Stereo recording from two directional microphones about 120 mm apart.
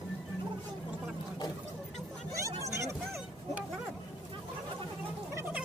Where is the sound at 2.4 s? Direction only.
25° right (ahead or behind).